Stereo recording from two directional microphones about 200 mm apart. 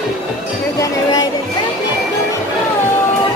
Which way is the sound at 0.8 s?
20° left (ahead or behind).